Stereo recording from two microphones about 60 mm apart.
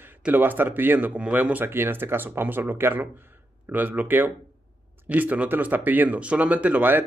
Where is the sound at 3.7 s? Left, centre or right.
Right.